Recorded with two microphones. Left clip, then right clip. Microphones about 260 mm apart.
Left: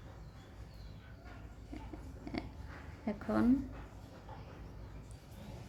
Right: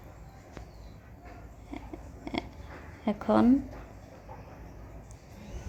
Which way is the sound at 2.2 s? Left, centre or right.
Centre.